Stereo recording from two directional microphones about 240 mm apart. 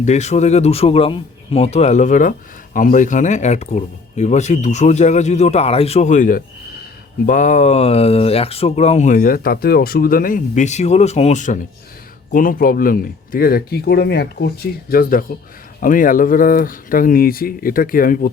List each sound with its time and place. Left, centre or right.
0.0 s speech: left